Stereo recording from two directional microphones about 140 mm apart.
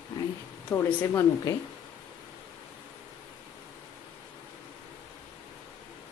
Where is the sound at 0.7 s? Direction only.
20° left (ahead or behind).